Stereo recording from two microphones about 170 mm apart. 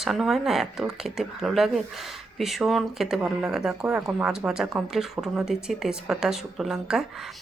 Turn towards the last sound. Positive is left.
turn(degrees=-5)  # may be behind; listen again after turning